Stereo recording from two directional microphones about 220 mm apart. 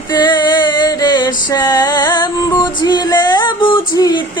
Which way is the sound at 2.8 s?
20° left (ahead or behind).